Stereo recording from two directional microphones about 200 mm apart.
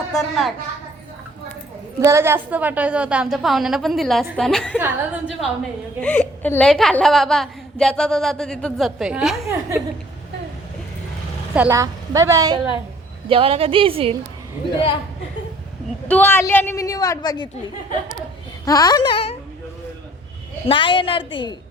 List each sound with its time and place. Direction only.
0.1 s a woman's voice: centre (ahead or behind)
2.0 s a woman's voice: 15° right (ahead or behind)
6.0 s a woman's voice: 5° left (ahead or behind)
11.5 s a woman's voice: 10° right (ahead or behind)
13.2 s a woman's voice: 30° right (ahead or behind)
16.0 s a woman's voice: 10° left (ahead or behind)
18.6 s a woman's voice: 20° left (ahead or behind)
20.7 s a woman's voice: 25° left (ahead or behind)